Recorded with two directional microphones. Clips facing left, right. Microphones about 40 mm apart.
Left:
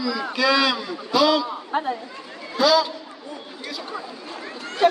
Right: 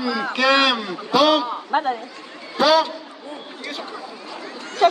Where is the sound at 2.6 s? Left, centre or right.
Right.